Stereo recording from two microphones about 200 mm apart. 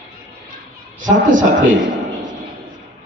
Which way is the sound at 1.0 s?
40° right (ahead or behind).